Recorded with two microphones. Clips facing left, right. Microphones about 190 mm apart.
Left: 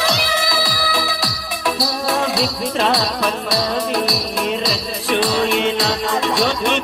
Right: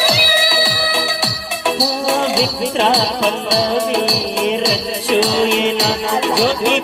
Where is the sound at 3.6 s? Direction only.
25° right (ahead or behind).